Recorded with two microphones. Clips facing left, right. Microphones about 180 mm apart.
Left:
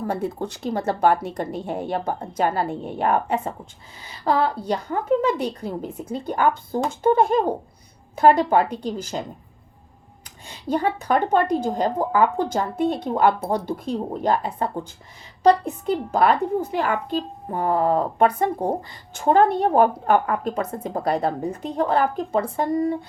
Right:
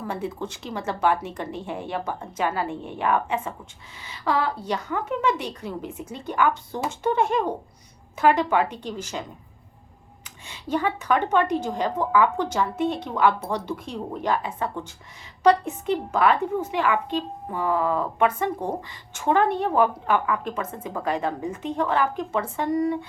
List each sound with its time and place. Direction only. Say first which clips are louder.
0.1 s a woman's voice: left 4 dB; 40° left (ahead or behind)
10.2 s a woman's voice: left 5 dB; 35° left (ahead or behind)
13.5 s speech: left 5 dB; 55° left (ahead or behind)
14.1 s a woman's voice: left 2 dB; 40° left (ahead or behind)